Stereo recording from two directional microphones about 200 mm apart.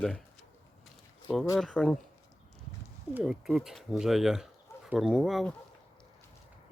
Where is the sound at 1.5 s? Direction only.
Centre (ahead or behind).